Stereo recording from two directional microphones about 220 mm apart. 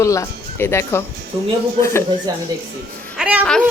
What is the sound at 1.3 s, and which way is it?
Speech, 20° right (ahead or behind).